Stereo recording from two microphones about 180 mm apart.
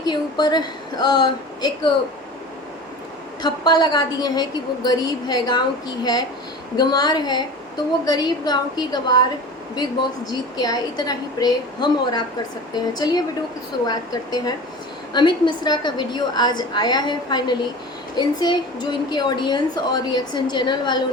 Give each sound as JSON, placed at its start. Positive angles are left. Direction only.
{"t": 0.0, "sound": "a woman's voice", "side_deg": 20}
{"t": 3.4, "sound": "a woman's voice", "side_deg": 25}
{"t": 10.2, "sound": "a woman's voice", "side_deg": 20}